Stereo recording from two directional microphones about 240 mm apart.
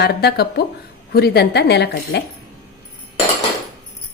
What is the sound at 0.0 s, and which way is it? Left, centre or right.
A woman's voice, left.